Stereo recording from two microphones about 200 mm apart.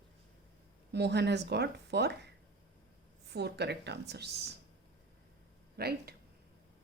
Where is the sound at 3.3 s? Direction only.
55° right (ahead or behind).